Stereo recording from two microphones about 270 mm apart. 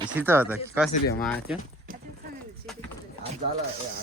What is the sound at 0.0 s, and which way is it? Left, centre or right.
Speech, centre.